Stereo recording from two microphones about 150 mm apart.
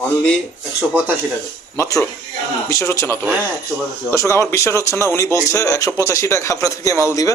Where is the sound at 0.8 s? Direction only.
10° right (ahead or behind).